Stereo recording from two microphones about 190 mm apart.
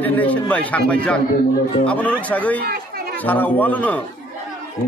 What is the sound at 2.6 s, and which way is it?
Chatter, 55° right (ahead or behind).